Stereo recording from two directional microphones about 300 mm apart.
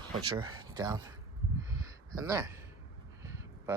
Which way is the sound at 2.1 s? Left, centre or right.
Centre.